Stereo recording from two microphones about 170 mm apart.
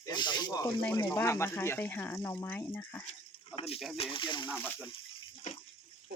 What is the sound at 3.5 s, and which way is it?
Speech, 35° left (ahead or behind).